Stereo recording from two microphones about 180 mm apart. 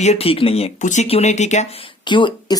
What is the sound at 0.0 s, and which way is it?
Speech, 35° left (ahead or behind).